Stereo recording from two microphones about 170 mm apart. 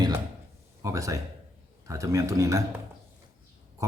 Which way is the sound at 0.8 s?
20° right (ahead or behind).